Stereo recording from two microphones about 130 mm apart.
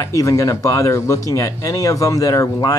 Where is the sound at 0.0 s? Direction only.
25° left (ahead or behind).